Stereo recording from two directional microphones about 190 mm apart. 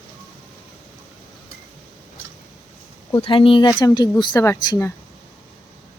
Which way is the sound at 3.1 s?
30° left (ahead or behind).